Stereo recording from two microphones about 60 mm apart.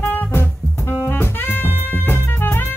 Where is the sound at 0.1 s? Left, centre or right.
Left.